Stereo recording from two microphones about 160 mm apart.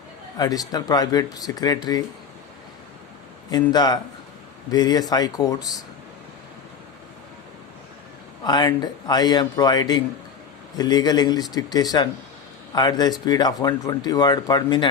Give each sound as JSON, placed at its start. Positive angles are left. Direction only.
{"t": 0.3, "sound": "speech", "side_deg": 25}
{"t": 3.5, "sound": "speech", "side_deg": 25}
{"t": 8.4, "sound": "speech", "side_deg": 25}